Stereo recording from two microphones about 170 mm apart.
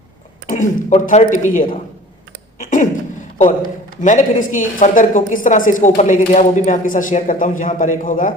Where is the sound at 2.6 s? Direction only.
50° left (ahead or behind).